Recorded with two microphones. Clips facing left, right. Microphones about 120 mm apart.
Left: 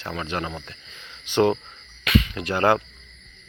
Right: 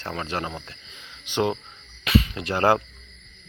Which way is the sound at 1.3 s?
15° right (ahead or behind).